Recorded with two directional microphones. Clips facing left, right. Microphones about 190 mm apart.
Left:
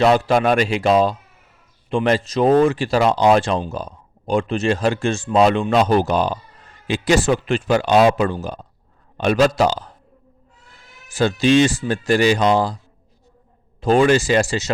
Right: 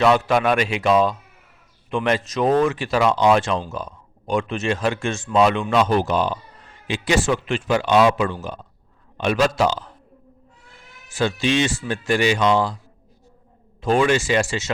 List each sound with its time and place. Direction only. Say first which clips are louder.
0.0 s speech: left 2 dB; 35° left (ahead or behind)
11.1 s speech: left 5 dB; 40° left (ahead or behind)
13.8 s speech: left 4 dB; 35° left (ahead or behind)